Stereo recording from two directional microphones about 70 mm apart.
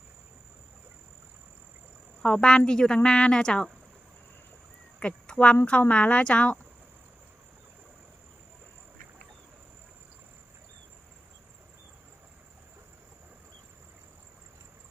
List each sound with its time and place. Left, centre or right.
2.2 s a woman's voice: centre
4.9 s a sound: centre
5.9 s a woman's voice: centre